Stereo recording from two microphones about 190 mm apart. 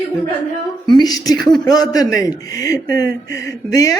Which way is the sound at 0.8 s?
20° left (ahead or behind).